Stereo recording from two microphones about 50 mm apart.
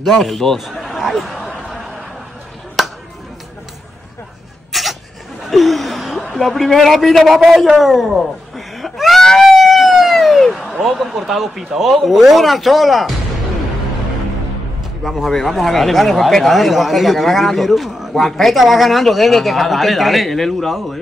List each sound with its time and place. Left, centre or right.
0.0 s speech: centre
0.6 s a sound: centre
2.8 s a sound: centre
4.7 s sneeze: centre
5.4 s chuckle: centre
6.3 s a man's voice: centre
9.2 s music: centre
10.8 s speech: centre
15.0 s speech: centre